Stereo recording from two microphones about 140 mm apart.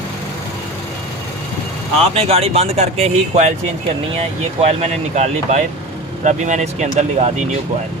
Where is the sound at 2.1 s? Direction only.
45° right (ahead or behind).